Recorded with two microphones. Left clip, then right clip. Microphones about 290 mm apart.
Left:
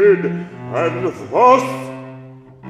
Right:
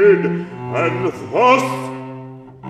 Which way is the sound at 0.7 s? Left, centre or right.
Centre.